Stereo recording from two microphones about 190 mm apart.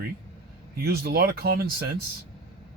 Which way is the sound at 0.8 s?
55° right (ahead or behind).